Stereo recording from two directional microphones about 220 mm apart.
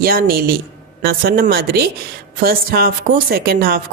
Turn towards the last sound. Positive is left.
turn(degrees=-45)  # may be behind; listen again after turning